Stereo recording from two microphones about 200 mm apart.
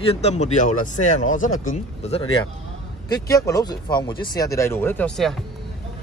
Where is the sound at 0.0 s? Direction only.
30° left (ahead or behind).